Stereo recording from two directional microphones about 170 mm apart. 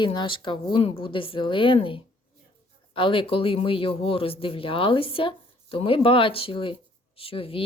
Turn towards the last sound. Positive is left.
turn(degrees=35)  # may be behind; listen again after turning